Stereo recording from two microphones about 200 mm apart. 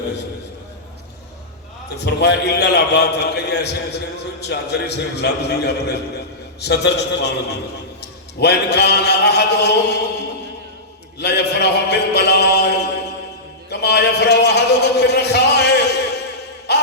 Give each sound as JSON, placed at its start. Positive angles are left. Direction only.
{"t": 2.0, "sound": "a man's voice", "side_deg": 55}
{"t": 11.2, "sound": "a man's voice", "side_deg": 55}
{"t": 16.7, "sound": "a sound", "side_deg": 55}